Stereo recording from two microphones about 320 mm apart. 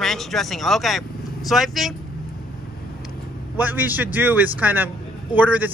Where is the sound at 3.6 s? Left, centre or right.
Centre.